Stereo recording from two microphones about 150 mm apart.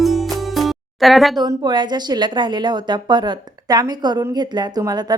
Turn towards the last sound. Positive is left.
turn(degrees=-25)  # may be behind; listen again after turning